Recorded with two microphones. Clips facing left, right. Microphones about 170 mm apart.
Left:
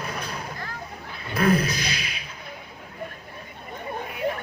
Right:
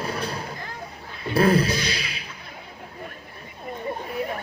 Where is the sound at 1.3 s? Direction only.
30° right (ahead or behind).